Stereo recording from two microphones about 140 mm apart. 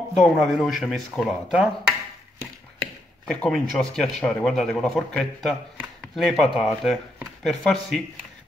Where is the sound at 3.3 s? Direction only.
5° left (ahead or behind).